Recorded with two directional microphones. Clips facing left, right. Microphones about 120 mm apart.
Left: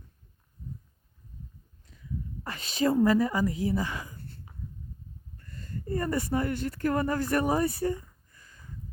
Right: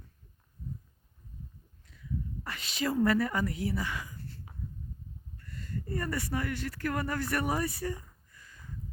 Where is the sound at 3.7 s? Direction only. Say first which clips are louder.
Left 4 dB; 40° left (ahead or behind).